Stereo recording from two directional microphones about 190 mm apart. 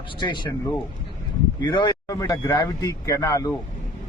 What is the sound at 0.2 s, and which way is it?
A man's voice, 25° left (ahead or behind).